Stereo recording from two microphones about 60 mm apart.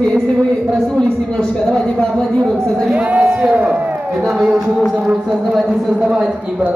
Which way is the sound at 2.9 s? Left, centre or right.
Right.